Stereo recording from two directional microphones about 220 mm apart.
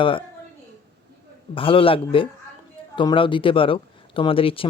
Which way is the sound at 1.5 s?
25° left (ahead or behind).